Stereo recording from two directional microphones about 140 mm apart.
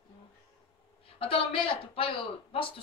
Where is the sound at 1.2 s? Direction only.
40° left (ahead or behind).